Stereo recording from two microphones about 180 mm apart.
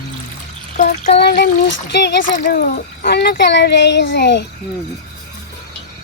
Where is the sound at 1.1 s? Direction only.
65° left (ahead or behind).